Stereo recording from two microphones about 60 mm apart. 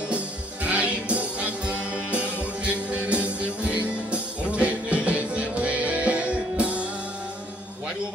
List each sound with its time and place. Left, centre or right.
0.7 s music: right